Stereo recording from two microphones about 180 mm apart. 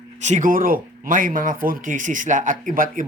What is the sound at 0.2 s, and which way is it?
Speech, 40° right (ahead or behind).